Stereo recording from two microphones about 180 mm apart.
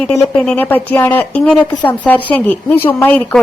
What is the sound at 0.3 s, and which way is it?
Speech, 10° left (ahead or behind).